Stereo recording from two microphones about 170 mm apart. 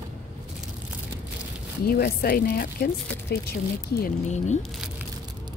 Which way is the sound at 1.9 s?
65° left (ahead or behind).